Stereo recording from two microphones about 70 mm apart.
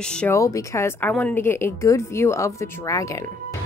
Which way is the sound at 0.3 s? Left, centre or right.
Left.